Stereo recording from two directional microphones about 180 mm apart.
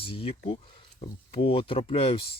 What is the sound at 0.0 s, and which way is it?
Speech, 30° left (ahead or behind).